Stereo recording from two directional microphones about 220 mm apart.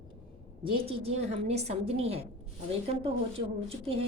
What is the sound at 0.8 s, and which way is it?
A woman's voice, 25° right (ahead or behind).